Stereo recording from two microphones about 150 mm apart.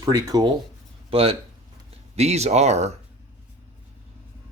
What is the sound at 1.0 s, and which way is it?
Speech, 40° right (ahead or behind).